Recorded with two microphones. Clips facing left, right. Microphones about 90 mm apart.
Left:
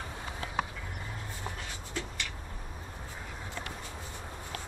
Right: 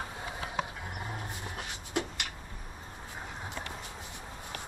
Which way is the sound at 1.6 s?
60° right (ahead or behind).